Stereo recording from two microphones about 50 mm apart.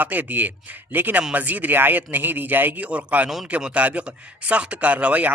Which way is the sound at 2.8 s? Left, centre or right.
Right.